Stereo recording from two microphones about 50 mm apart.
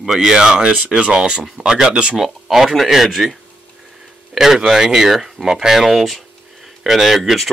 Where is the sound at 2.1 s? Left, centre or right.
Centre.